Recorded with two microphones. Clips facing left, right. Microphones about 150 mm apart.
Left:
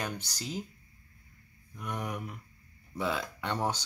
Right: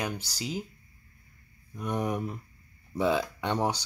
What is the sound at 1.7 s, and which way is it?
Speech, 25° right (ahead or behind).